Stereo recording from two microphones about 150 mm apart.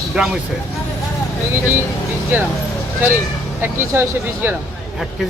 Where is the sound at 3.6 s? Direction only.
15° right (ahead or behind).